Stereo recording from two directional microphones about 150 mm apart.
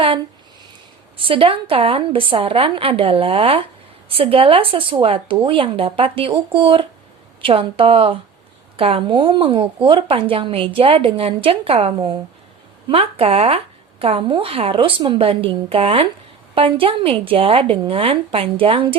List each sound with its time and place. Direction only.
1.2 s speech: 35° right (ahead or behind)